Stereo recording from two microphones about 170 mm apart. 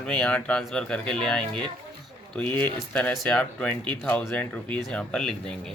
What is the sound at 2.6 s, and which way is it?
Speech, 5° left (ahead or behind).